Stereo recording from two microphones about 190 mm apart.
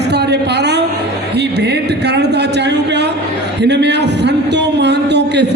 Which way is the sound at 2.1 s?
60° right (ahead or behind).